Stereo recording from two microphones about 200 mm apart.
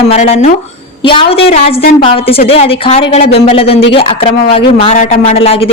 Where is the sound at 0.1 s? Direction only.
30° left (ahead or behind).